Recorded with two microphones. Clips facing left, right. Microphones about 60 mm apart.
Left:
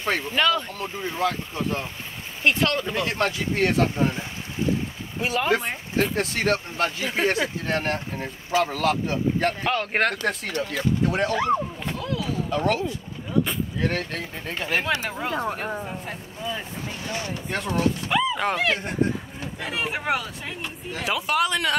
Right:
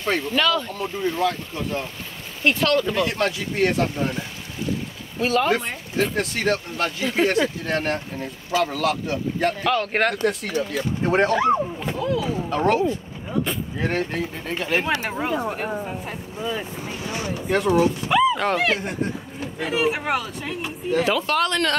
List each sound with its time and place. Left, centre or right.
0.0 s speech: centre
5.2 s speech: centre
6.1 s speech: left
9.8 s speech: centre
10.5 s speech: centre
11.1 s speech: right
11.3 s speech: centre
12.4 s speech: right
14.4 s speech: centre
14.9 s speech: right
15.5 s speech: centre